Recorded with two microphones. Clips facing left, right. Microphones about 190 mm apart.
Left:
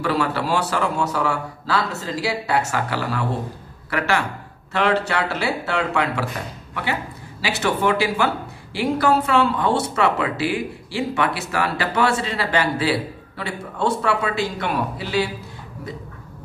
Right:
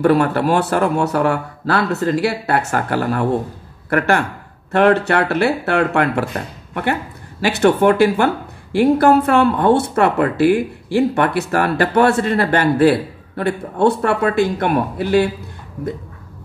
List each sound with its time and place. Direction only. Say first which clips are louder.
0.0 s a woman's voice: right 8 dB; 55° right (ahead or behind)